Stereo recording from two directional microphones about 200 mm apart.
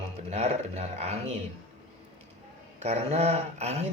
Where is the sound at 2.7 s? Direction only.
35° right (ahead or behind).